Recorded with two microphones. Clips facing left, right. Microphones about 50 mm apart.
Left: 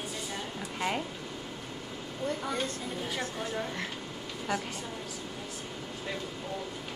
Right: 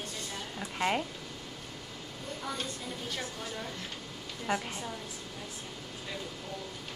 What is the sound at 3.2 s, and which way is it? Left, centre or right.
Speech, left.